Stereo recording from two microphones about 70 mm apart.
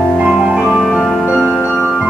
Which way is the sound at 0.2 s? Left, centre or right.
Centre.